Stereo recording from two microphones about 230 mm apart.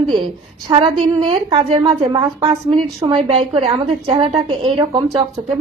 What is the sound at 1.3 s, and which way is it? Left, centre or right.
A woman's voice, right.